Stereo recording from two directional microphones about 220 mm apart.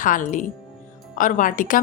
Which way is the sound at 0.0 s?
35° left (ahead or behind).